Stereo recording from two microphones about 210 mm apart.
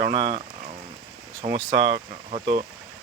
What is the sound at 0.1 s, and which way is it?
Speech, 25° right (ahead or behind).